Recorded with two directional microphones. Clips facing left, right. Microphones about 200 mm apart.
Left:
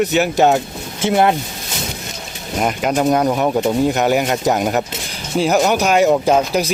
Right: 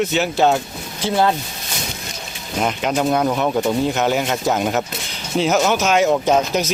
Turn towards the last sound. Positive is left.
turn(degrees=10)  # may be behind; listen again after turning